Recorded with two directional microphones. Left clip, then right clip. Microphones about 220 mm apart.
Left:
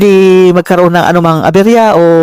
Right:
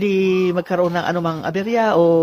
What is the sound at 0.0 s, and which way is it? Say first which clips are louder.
Speech: left 13 dB; 50° left (ahead or behind).